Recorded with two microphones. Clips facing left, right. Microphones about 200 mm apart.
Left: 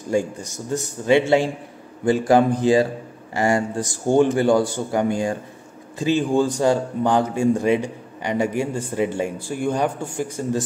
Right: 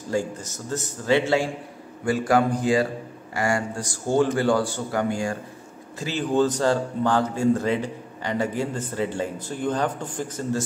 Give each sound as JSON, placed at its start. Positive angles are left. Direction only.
{"t": 0.1, "sound": "a man's voice", "side_deg": 15}